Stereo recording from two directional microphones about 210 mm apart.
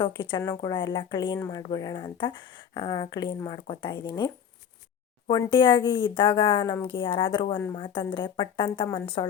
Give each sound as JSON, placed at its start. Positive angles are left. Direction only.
{"t": 0.0, "sound": "speech", "side_deg": 20}
{"t": 5.3, "sound": "speech", "side_deg": 25}